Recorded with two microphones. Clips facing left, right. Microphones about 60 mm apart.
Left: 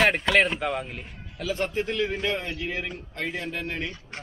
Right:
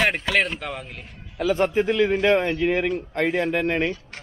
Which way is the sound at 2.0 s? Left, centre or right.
Right.